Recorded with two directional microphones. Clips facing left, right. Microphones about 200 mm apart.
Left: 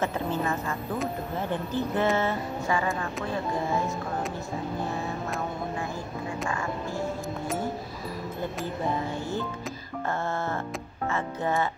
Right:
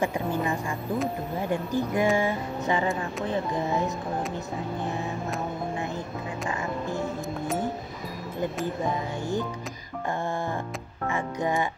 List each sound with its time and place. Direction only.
0.0 s a woman's voice: 15° right (ahead or behind)
11.1 s a woman's voice: 15° right (ahead or behind)